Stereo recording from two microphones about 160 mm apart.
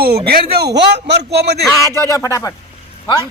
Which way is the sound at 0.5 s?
90° right.